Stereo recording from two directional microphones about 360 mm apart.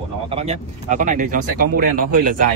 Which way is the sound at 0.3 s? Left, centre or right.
Centre.